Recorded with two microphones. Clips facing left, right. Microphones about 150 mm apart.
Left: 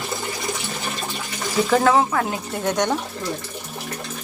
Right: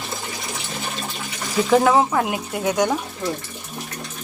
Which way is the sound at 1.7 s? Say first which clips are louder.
Right 2 dB; 10° right (ahead or behind).